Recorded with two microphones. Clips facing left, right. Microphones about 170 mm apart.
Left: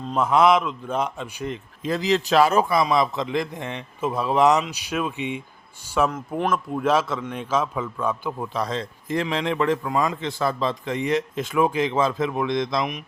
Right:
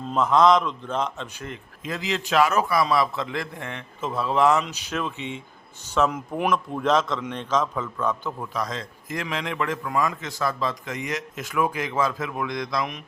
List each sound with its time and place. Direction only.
0.2 s a man's voice: 10° left (ahead or behind)
1.8 s a man's voice: 35° left (ahead or behind); by 5.4 s 15° left (ahead or behind)
6.1 s speech: 10° right (ahead or behind)
6.5 s a man's voice: 10° left (ahead or behind)
8.4 s a man's voice: 30° left (ahead or behind)